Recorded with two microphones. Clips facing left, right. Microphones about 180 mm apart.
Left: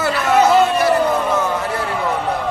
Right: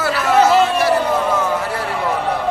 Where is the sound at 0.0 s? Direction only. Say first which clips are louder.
Even; 5° right (ahead or behind).